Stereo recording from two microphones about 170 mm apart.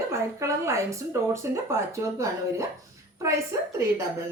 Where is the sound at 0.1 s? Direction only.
15° right (ahead or behind).